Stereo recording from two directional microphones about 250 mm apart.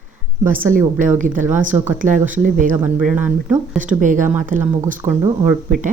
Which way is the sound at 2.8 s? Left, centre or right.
Centre.